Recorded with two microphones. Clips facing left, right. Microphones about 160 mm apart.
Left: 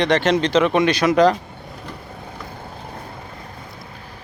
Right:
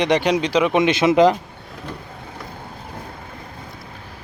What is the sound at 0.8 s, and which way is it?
Speech, 20° right (ahead or behind).